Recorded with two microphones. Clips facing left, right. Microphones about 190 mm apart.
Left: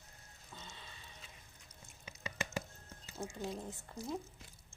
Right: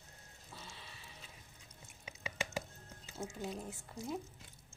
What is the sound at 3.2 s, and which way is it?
A woman's voice, centre (ahead or behind).